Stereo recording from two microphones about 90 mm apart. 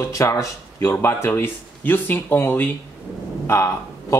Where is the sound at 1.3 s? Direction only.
20° left (ahead or behind).